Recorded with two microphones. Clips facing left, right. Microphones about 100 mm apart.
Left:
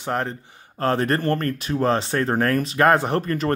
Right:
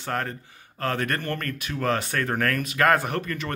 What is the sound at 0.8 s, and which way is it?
Speech, 30° left (ahead or behind).